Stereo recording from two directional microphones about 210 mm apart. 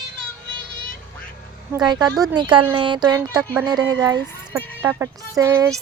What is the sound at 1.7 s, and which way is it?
A child's voice, 20° right (ahead or behind).